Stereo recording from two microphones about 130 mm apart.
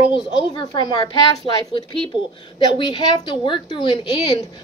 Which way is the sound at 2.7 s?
40° left (ahead or behind).